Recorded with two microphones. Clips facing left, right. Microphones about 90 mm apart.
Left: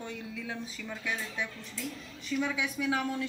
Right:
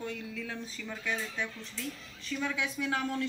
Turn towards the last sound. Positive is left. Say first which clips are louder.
# left 1 dB
turn(degrees=10)  # may be behind; listen again after turning